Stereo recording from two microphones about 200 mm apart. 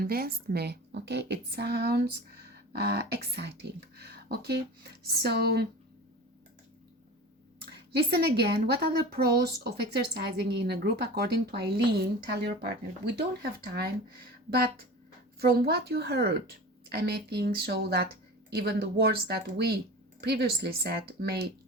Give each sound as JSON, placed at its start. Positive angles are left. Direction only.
{"t": 0.0, "sound": "a woman's voice", "side_deg": -50}
{"t": 7.6, "sound": "a woman's voice", "side_deg": -55}